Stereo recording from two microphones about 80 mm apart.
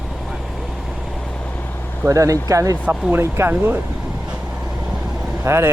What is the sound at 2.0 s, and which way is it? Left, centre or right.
Speech, right.